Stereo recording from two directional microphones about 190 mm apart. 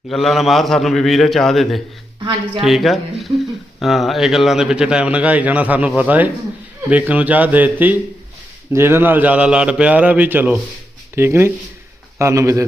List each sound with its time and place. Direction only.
0.1 s a man's voice: centre (ahead or behind); by 12.6 s 15° right (ahead or behind)